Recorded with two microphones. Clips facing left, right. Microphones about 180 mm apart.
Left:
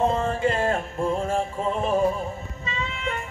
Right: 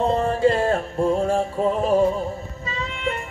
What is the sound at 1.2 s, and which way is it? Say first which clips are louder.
Music: right 5 dB; 35° right (ahead or behind).